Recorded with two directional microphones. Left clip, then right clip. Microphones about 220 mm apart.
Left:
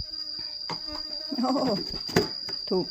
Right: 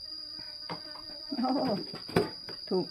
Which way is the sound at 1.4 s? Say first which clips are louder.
Left 4 dB; 25° left (ahead or behind).